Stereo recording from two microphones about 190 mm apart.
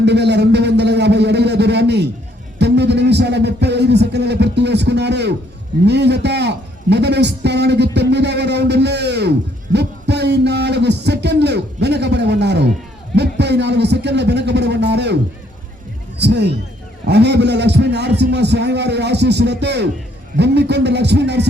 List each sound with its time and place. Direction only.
0.0 s a man's voice: 60° right (ahead or behind)
2.6 s music: 60° right (ahead or behind)
5.8 s a man's voice: 65° right (ahead or behind)
9.7 s a sound: 60° right (ahead or behind)
16.1 s a man's voice: 60° right (ahead or behind)